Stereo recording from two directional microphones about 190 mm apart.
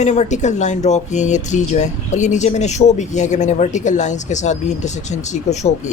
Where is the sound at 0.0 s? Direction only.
40° left (ahead or behind).